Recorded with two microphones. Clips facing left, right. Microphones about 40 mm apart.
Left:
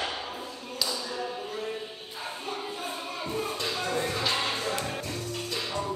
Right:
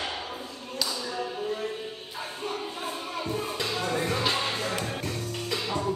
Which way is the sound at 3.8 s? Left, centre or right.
Right.